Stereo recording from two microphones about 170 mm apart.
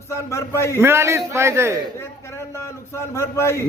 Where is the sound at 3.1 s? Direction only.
15° left (ahead or behind).